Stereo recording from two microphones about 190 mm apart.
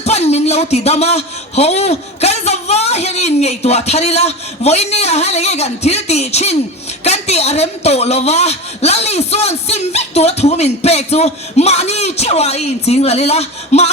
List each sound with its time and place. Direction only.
0.0 s a man's voice: 35° left (ahead or behind)